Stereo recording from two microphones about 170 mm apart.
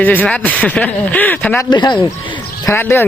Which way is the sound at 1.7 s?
25° left (ahead or behind).